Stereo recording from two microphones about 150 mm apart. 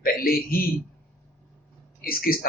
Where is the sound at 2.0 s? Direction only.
80° left.